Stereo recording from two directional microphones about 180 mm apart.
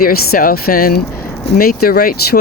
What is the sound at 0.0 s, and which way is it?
Speech, 55° left (ahead or behind).